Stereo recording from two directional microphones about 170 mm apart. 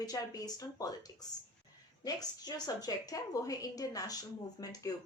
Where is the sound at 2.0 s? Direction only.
25° left (ahead or behind).